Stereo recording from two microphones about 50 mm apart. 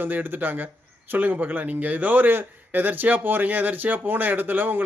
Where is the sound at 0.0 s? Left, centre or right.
Right.